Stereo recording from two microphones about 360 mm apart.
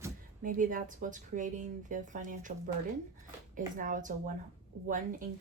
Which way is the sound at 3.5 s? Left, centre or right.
Right.